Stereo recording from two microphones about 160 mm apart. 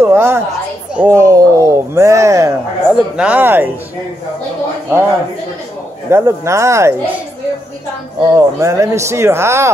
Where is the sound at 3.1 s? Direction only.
5° right (ahead or behind).